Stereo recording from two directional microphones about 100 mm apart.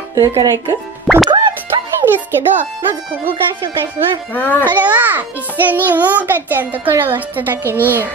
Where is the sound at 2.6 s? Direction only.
15° right (ahead or behind).